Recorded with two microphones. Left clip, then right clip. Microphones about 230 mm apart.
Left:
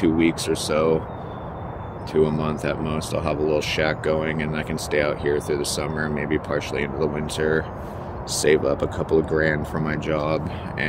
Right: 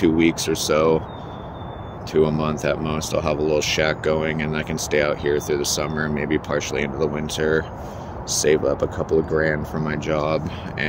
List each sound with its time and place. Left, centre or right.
0.0 s speech: right
2.1 s speech: centre